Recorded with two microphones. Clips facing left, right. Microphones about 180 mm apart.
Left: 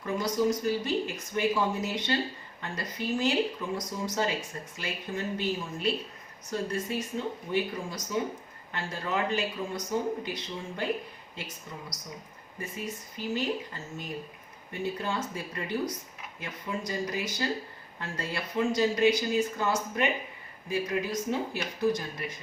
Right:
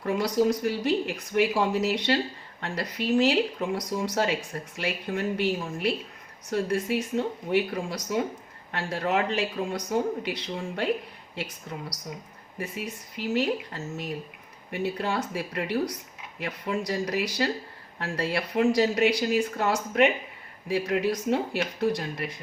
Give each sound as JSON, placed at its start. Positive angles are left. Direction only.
{"t": 0.0, "sound": "speech", "side_deg": -70}
{"t": 12.5, "sound": "speech", "side_deg": -70}